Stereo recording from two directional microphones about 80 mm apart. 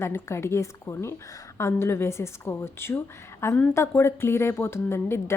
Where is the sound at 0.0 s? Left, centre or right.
Left.